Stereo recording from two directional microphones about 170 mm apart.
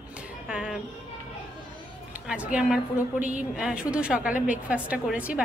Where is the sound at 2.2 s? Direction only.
10° right (ahead or behind).